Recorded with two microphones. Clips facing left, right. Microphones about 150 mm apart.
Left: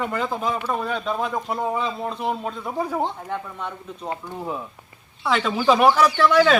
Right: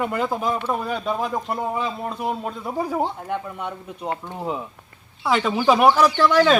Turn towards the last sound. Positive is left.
turn(degrees=0)  # may be behind; listen again after turning